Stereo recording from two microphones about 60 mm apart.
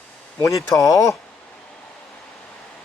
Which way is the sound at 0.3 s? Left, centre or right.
Left.